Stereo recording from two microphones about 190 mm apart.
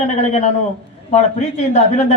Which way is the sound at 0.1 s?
35° left (ahead or behind).